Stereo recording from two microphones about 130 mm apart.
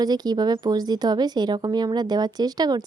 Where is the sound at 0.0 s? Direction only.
30° right (ahead or behind).